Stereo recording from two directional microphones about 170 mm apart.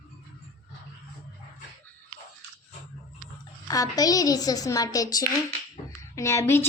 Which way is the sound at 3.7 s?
20° left (ahead or behind).